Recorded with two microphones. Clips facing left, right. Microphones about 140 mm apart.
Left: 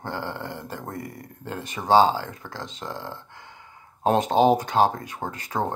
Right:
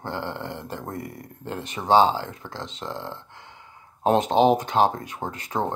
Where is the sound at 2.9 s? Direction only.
10° left (ahead or behind).